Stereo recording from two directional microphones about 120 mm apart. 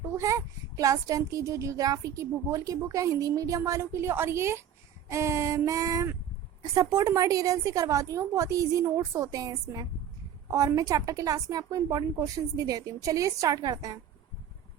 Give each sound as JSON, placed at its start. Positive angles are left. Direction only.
{"t": 0.0, "sound": "a child's voice", "side_deg": -25}